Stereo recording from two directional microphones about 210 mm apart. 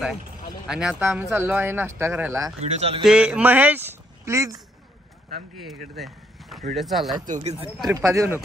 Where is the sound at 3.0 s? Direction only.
5° right (ahead or behind).